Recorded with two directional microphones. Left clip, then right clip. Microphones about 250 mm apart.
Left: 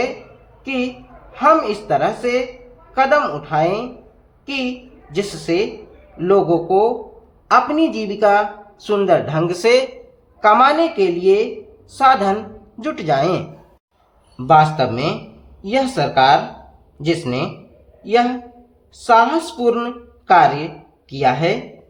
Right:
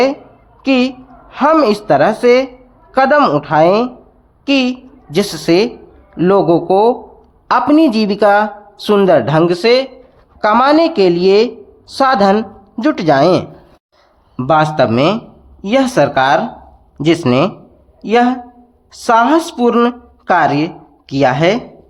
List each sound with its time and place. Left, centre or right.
0.6 s a woman's voice: right
9.5 s speech: centre
10.4 s speech: right